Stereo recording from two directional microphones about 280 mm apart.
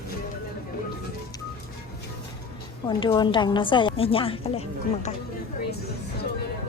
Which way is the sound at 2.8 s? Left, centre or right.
Centre.